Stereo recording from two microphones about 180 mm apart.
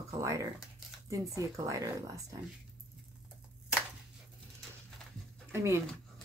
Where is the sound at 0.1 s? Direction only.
15° right (ahead or behind).